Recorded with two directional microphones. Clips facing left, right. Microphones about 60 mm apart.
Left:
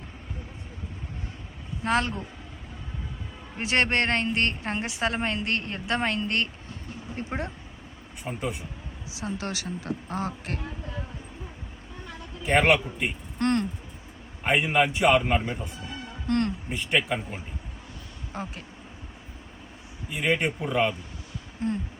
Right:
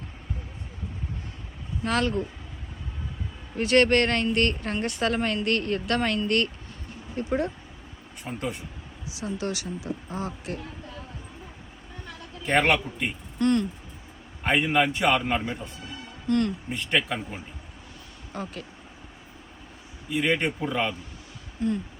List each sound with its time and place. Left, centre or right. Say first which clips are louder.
1.8 s a woman's voice: even; left
3.6 s a woman's voice: right 4 dB; left
8.2 s speech: even; centre
9.2 s speech: right 2 dB; left
12.5 s a man's voice: left 1 dB; centre
13.4 s speech: right 2 dB; left
14.4 s a man's voice: even; centre
18.3 s a woman's voice: even; left
20.1 s a man's voice: right 1 dB; centre